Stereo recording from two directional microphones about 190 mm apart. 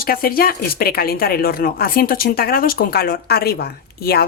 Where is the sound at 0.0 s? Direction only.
50° left (ahead or behind).